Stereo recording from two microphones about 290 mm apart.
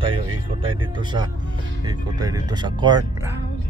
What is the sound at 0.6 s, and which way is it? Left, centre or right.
Speech, centre.